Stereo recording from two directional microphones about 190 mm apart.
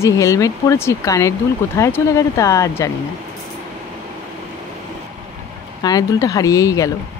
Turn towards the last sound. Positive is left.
turn(degrees=15)  # may be behind; listen again after turning